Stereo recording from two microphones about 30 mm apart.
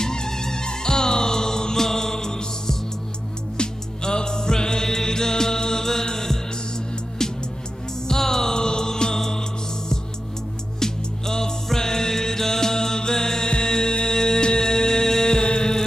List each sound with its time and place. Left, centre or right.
0.0 s music: left
10.8 s music: centre